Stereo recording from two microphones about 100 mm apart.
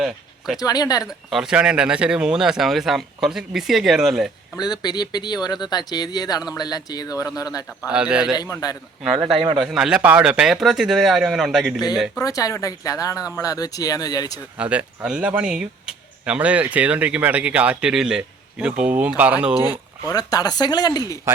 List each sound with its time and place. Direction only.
0.0 s a sound: 5° right (ahead or behind)
0.6 s speech: 40° left (ahead or behind)
1.0 s speech: 5° right (ahead or behind)
4.5 s speech: 45° left (ahead or behind)
7.8 s speech: 10° right (ahead or behind)
8.4 s speech: 40° left (ahead or behind)
9.1 s speech: 70° right (ahead or behind)
9.6 s speech: 5° right (ahead or behind)
12.2 s speech: 35° left (ahead or behind)
14.6 s speech: 15° right (ahead or behind)
20.1 s speech: 40° left (ahead or behind)